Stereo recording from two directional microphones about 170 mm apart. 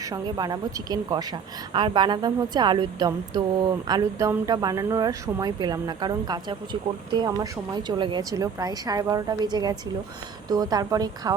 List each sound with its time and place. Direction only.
0.1 s a woman's voice: 20° right (ahead or behind)